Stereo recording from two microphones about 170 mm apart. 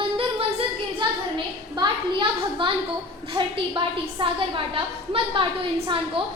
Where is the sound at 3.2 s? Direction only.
30° right (ahead or behind).